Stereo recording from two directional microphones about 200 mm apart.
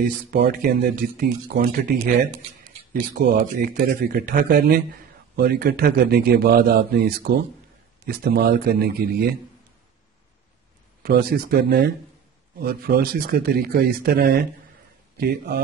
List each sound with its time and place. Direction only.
0.0 s speech: 45° right (ahead or behind)
11.0 s speech: 50° right (ahead or behind)